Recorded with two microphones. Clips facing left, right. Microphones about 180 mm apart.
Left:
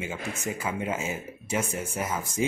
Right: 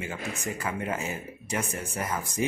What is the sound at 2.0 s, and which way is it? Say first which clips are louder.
Speech: left 1 dB; 20° left (ahead or behind).